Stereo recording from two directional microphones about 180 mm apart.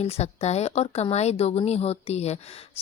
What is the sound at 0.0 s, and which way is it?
Speech, 35° left (ahead or behind).